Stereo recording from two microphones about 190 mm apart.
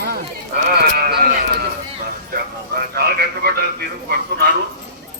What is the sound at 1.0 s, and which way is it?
Sheep, 55° right (ahead or behind).